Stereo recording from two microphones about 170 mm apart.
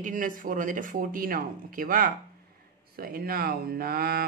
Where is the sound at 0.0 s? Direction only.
50° right (ahead or behind).